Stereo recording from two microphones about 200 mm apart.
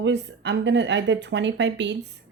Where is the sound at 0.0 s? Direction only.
60° right (ahead or behind).